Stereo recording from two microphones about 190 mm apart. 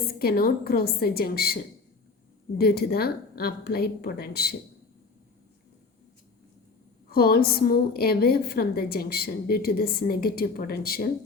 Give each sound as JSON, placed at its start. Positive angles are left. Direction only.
{"t": 0.1, "sound": "a woman's voice", "side_deg": 55}
{"t": 2.6, "sound": "a woman's voice", "side_deg": 55}
{"t": 7.1, "sound": "a woman's voice", "side_deg": 55}